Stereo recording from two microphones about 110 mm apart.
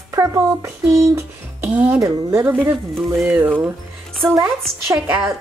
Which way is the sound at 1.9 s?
25° right (ahead or behind).